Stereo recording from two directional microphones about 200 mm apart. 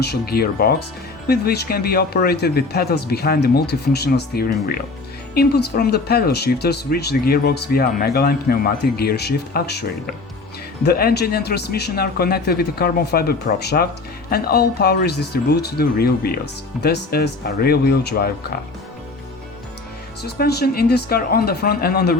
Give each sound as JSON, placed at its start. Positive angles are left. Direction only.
{"t": 0.0, "sound": "speech", "side_deg": 50}
{"t": 20.2, "sound": "speech", "side_deg": 55}